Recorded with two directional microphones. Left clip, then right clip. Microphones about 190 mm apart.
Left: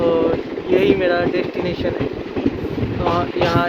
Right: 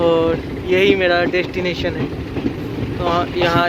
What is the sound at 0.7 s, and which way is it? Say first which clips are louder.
Speech: right 2 dB; 15° right (ahead or behind).